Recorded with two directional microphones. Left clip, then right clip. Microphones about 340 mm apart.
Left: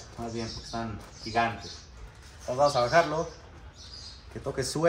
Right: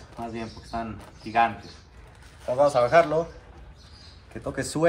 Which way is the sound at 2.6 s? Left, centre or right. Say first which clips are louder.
Right 4 dB; right.